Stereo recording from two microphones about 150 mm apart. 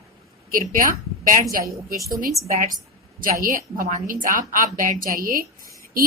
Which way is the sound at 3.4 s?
65° right (ahead or behind).